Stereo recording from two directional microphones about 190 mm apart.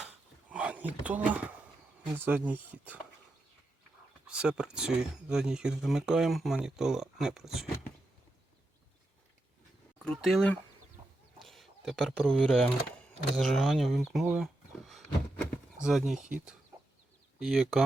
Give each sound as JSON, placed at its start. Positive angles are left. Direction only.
{"t": 0.5, "sound": "speech", "side_deg": -5}
{"t": 4.3, "sound": "speech", "side_deg": -5}
{"t": 10.0, "sound": "speech", "side_deg": 0}
{"t": 13.4, "sound": "a sound", "side_deg": 0}
{"t": 17.4, "sound": "speech", "side_deg": 0}